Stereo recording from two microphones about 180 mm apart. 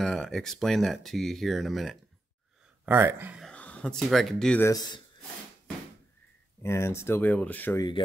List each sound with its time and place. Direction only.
0.0 s speech: centre (ahead or behind)
2.8 s speech: 10° right (ahead or behind)
3.3 s speech: 5° left (ahead or behind)
4.7 s speech: 25° left (ahead or behind)
6.6 s speech: 15° left (ahead or behind)